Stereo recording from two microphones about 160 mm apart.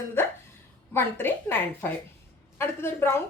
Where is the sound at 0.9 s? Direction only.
15° left (ahead or behind).